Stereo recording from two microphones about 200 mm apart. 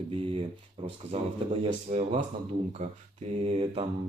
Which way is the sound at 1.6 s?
35° right (ahead or behind).